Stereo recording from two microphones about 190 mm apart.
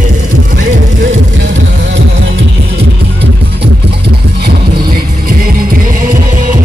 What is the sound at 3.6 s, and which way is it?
Music, 60° right (ahead or behind).